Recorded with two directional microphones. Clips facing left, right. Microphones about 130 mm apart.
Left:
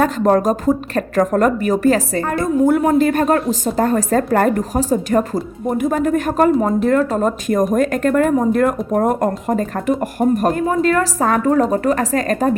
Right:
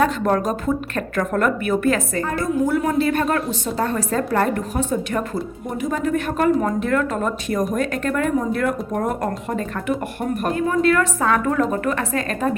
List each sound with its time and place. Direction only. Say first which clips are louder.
0.0 s speech: left 4 dB; 40° left (ahead or behind)
2.6 s speech: left 7 dB; 50° left (ahead or behind)